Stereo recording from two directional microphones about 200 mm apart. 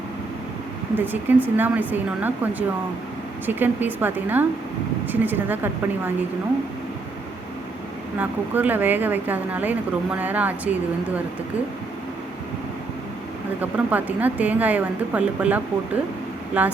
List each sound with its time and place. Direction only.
0.9 s speech: 10° right (ahead or behind)
8.2 s speech: 10° right (ahead or behind)
13.6 s speech: 10° right (ahead or behind)